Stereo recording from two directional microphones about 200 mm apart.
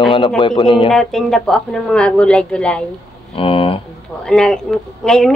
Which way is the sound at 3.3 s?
25° left (ahead or behind).